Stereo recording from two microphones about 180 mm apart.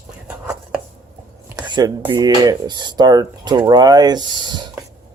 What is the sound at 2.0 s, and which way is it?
Speech, 20° right (ahead or behind).